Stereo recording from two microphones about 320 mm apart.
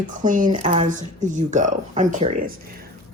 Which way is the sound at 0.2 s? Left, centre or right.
Right.